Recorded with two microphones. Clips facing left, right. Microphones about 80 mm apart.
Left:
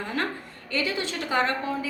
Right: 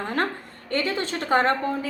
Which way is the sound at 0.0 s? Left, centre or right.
Right.